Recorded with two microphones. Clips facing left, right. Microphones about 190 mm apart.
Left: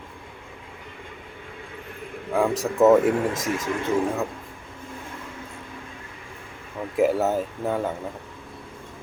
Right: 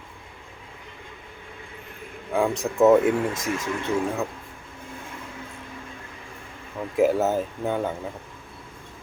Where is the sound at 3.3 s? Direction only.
20° left (ahead or behind).